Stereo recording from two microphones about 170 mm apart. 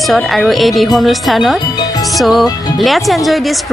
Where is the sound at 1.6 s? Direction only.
25° left (ahead or behind).